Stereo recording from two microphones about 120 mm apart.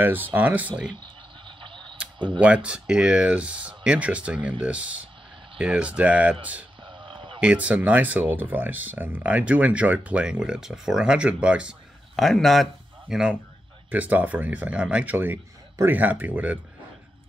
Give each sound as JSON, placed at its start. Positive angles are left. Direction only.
{"t": 0.0, "sound": "speech", "side_deg": -15}
{"t": 0.8, "sound": "speech", "side_deg": -40}
{"t": 1.6, "sound": "a sound", "side_deg": -45}
{"t": 2.1, "sound": "speech", "side_deg": -40}
{"t": 2.4, "sound": "speech", "side_deg": -10}
{"t": 6.8, "sound": "a sound", "side_deg": -40}
{"t": 7.3, "sound": "speech", "side_deg": -10}
{"t": 12.2, "sound": "speech", "side_deg": 0}